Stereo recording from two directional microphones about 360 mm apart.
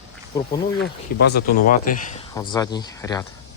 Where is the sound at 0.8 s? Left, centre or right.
Left.